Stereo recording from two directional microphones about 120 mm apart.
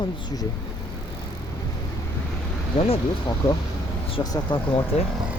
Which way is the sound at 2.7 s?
55° left (ahead or behind).